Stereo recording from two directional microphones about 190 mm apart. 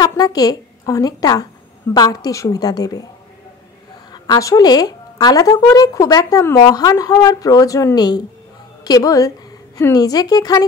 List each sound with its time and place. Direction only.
0.0 s a woman's voice: 20° left (ahead or behind)
4.1 s a woman's voice: 20° left (ahead or behind)